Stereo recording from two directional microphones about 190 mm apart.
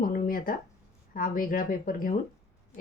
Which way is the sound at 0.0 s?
50° left (ahead or behind).